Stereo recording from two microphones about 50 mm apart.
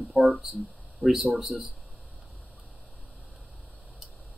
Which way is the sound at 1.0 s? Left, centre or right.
Right.